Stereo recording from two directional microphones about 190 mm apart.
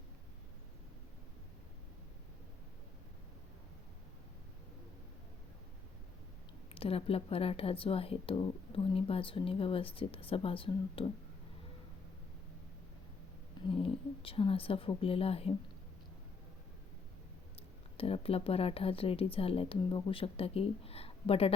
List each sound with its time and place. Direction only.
6.7 s speech: 30° left (ahead or behind)
13.7 s speech: 30° left (ahead or behind)
17.9 s speech: 30° left (ahead or behind)